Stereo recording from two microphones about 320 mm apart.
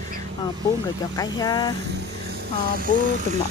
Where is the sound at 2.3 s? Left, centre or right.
Right.